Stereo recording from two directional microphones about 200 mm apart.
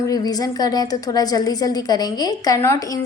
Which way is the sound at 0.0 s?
20° left (ahead or behind).